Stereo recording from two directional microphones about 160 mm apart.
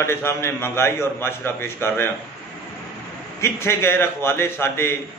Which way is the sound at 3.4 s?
15° left (ahead or behind).